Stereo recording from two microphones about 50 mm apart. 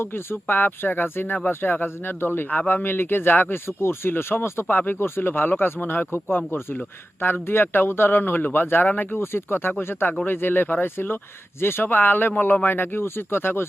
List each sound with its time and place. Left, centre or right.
0.0 s speech: left
2.8 s speech: left
3.7 s speech: left